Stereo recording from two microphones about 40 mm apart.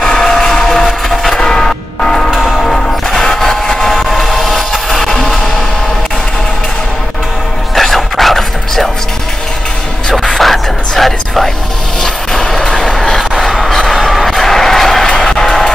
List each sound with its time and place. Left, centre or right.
0.0 s train: centre
1.4 s a sound: centre
2.6 s music: centre
7.7 s music: centre
10.1 s music: centre
13.4 s train: centre
14.0 s a sound: centre
15.0 s music: centre